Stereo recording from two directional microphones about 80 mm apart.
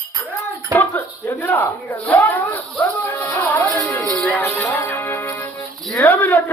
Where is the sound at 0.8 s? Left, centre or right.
Left.